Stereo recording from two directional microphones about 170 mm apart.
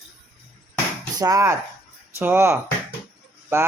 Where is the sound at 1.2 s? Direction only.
20° right (ahead or behind).